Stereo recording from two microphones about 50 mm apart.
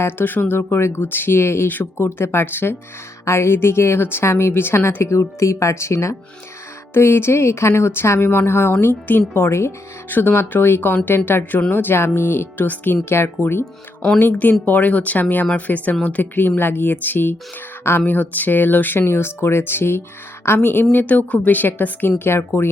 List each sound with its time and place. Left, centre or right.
0.0 s speech: left
3.2 s speech: left
5.0 s speech: left
6.9 s a woman's voice: left
8.7 s a woman's voice: left
10.1 s speech: left
12.6 s speech: left
13.1 s speech: left
14.2 s a woman's voice: left
16.6 s speech: left
18.9 s a woman's voice: left
20.9 s speech: left